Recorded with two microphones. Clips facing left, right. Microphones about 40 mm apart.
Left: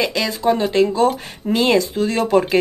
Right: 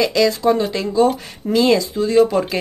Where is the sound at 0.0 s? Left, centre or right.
Left.